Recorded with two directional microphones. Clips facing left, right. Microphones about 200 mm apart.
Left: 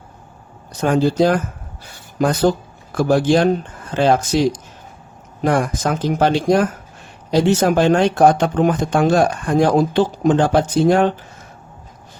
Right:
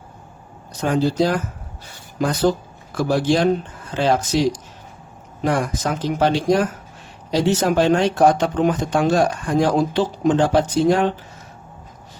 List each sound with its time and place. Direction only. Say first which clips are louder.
0.8 s speech: left 3 dB; 50° left (ahead or behind)
2.9 s speech: left 4 dB; 50° left (ahead or behind)